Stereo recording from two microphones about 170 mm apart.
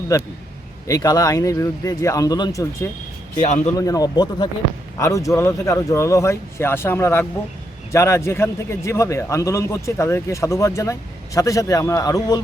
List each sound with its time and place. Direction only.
0.1 s a man's voice: 15° left (ahead or behind)